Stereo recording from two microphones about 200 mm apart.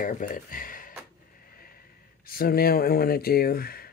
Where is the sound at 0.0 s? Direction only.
45° left (ahead or behind).